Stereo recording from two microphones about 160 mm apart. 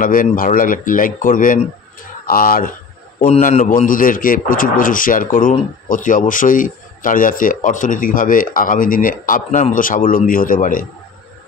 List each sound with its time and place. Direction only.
0.0 s a man's voice: 60° left (ahead or behind)
3.3 s a man's voice: 45° left (ahead or behind)